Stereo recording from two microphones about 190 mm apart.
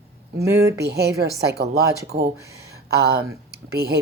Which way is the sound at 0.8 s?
55° right (ahead or behind).